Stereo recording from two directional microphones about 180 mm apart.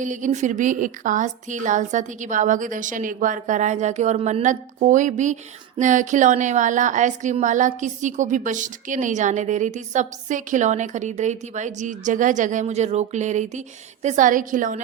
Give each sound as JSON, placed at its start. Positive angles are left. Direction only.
{"t": 0.0, "sound": "a woman's voice", "side_deg": -45}